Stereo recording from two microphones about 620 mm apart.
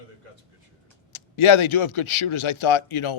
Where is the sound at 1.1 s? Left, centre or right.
Left.